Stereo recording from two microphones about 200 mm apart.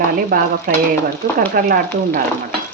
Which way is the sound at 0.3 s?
50° right (ahead or behind).